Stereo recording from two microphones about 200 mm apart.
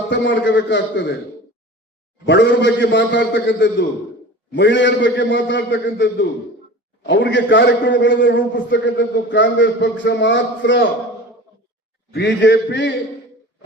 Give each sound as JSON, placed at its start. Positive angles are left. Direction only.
{"t": 0.1, "sound": "a man's voice", "side_deg": 65}
{"t": 2.2, "sound": "a man's voice", "side_deg": 60}
{"t": 12.1, "sound": "a man's voice", "side_deg": 60}